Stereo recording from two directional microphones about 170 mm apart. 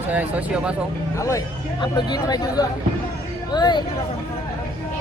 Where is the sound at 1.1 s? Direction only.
20° left (ahead or behind).